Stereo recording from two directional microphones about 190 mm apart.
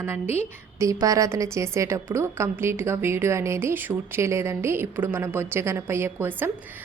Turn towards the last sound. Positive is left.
turn(degrees=-10)  # may be behind; listen again after turning